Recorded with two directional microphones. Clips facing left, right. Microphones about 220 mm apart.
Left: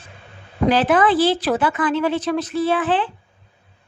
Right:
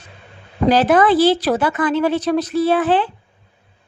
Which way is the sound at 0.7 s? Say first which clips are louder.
Right 3 dB; 40° right (ahead or behind).